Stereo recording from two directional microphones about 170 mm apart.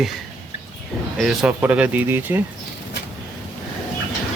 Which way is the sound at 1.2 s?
5° right (ahead or behind).